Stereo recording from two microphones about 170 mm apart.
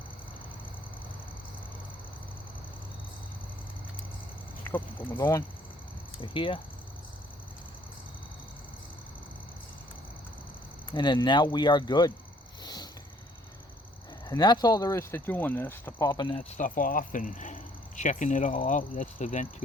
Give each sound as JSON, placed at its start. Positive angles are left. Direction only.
{"t": 4.7, "sound": "speech", "side_deg": 15}
{"t": 6.3, "sound": "speech", "side_deg": 30}
{"t": 10.9, "sound": "speech", "side_deg": 25}
{"t": 12.6, "sound": "a sound", "side_deg": 25}
{"t": 14.3, "sound": "speech", "side_deg": 25}
{"t": 16.4, "sound": "speech", "side_deg": 45}